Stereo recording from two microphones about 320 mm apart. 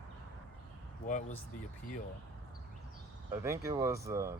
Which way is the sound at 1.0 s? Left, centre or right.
Left.